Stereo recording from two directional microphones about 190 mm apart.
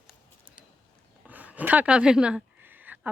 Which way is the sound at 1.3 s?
10° right (ahead or behind).